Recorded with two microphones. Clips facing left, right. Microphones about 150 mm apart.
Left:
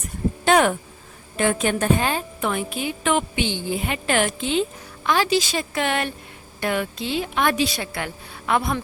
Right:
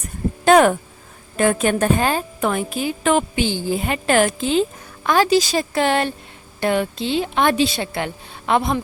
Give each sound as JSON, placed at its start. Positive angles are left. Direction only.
{"t": 0.4, "sound": "a woman's voice", "side_deg": -45}